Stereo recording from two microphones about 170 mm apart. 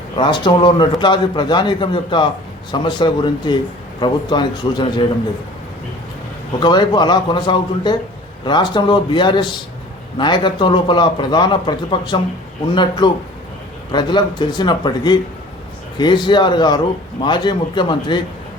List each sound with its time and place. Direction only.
0.2 s a man's voice: 30° left (ahead or behind)
6.6 s a man's voice: 25° left (ahead or behind)